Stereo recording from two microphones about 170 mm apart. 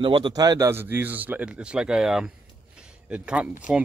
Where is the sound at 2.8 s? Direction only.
5° right (ahead or behind).